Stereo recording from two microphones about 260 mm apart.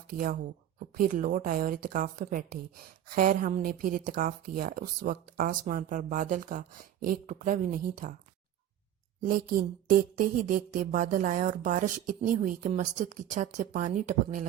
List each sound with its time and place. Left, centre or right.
0.1 s a woman's voice: right
9.2 s a woman's voice: right